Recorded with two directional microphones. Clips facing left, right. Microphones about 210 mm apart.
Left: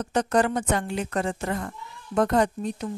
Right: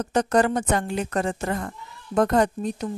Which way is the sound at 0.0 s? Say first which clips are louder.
Right 2 dB; 40° right (ahead or behind).